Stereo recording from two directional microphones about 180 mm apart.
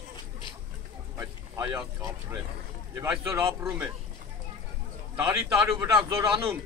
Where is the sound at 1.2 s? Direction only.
15° right (ahead or behind).